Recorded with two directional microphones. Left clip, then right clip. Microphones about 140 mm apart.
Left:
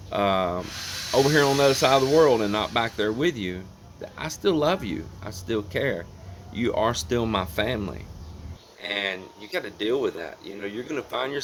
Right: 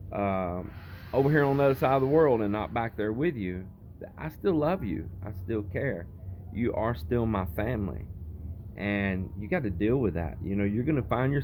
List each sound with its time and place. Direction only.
0.1 s speech: 30° left (ahead or behind)